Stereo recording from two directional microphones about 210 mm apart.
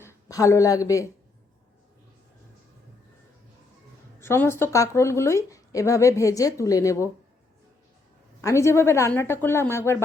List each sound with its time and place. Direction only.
0.0 s speech: 15° left (ahead or behind)
4.2 s speech: 10° left (ahead or behind)
8.4 s speech: 15° left (ahead or behind)